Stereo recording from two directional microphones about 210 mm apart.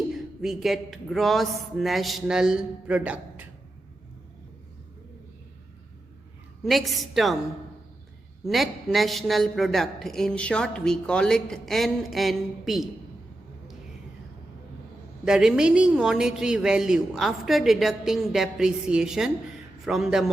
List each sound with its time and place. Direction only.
0.1 s a woman's voice: centre (ahead or behind)
6.6 s a woman's voice: centre (ahead or behind)
8.4 s a woman's voice: centre (ahead or behind)
15.2 s a woman's voice: 5° right (ahead or behind)